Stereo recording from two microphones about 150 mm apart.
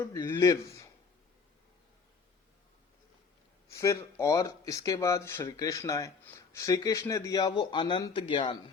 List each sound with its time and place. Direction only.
0.0 s speech: 20° left (ahead or behind)
3.7 s speech: 20° left (ahead or behind)